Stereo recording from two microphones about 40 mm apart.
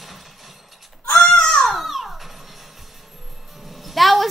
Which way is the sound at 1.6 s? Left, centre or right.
Centre.